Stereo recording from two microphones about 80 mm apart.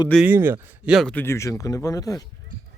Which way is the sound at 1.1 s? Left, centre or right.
Left.